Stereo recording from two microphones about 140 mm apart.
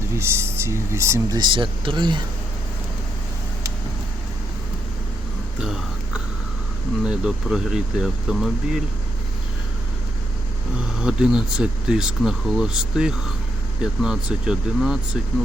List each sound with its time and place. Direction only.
0.1 s speech: 20° right (ahead or behind)
1.4 s speech: 35° right (ahead or behind)
5.6 s a sound: 5° right (ahead or behind)
7.0 s speech: 5° right (ahead or behind)
10.8 s speech: 5° right (ahead or behind)